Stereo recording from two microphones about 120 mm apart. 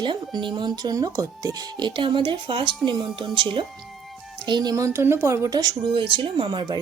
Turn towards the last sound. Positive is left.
turn(degrees=-40)  # may be behind; listen again after turning